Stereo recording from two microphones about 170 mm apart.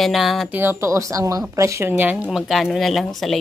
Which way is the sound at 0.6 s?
15° right (ahead or behind).